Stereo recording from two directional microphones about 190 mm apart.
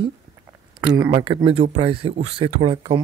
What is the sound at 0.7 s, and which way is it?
Speech, 20° right (ahead or behind).